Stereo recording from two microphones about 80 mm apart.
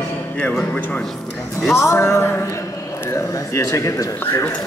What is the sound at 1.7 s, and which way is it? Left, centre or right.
Speech, left.